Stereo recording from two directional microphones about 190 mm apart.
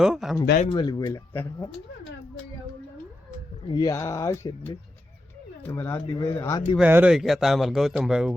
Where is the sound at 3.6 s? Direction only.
20° left (ahead or behind).